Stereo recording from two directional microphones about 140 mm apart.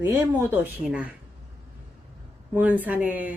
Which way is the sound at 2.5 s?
10° right (ahead or behind).